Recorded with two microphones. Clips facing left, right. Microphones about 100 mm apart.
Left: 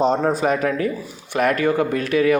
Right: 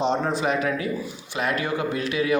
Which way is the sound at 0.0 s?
40° left (ahead or behind).